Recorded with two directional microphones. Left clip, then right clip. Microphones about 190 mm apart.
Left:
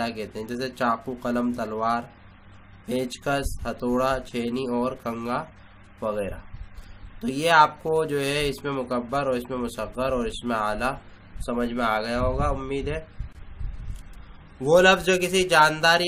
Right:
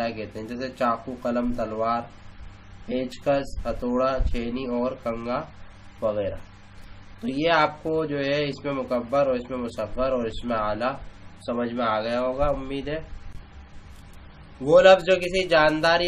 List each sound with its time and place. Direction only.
0.0 s speech: 40° left (ahead or behind)
7.2 s speech: 40° left (ahead or behind)
14.7 s speech: 35° left (ahead or behind)